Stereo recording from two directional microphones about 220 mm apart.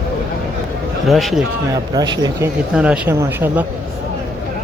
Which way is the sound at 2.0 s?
15° right (ahead or behind).